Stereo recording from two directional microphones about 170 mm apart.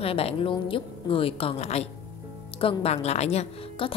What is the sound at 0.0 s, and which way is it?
A woman's voice, 35° left (ahead or behind).